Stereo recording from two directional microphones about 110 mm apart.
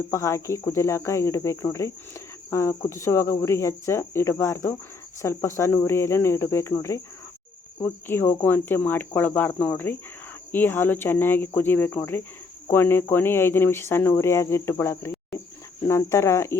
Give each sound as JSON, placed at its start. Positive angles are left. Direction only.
{"t": 0.1, "sound": "speech", "side_deg": 25}